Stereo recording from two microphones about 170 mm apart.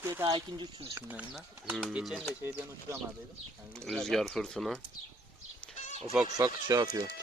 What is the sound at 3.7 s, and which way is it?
Speech, 5° left (ahead or behind).